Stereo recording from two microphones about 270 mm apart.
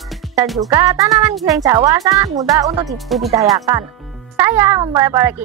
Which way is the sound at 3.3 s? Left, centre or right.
Centre.